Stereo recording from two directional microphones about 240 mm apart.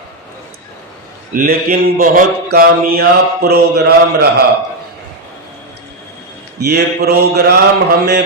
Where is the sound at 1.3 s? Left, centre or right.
Right.